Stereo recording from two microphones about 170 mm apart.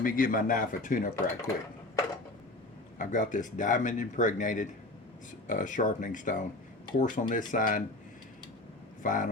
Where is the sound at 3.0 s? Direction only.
45° left (ahead or behind).